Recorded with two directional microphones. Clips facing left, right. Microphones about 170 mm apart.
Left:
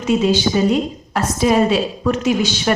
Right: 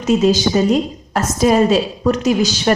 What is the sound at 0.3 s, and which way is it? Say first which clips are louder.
A woman's voice: right 2 dB; 40° right (ahead or behind).